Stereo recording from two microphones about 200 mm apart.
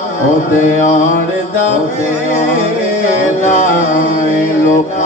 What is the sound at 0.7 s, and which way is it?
Music, 40° left (ahead or behind).